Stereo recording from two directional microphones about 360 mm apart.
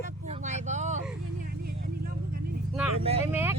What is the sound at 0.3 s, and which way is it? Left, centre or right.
Vehicle, centre.